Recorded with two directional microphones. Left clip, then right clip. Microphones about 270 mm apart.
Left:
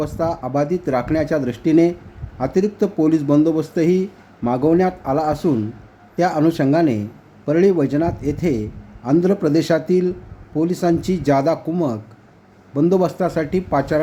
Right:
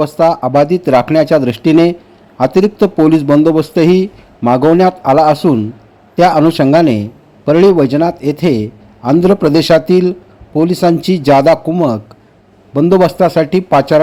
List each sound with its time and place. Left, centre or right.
0.0 s a man's voice: centre